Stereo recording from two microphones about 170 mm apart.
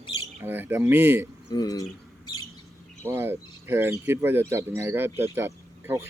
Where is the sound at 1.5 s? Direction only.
20° left (ahead or behind).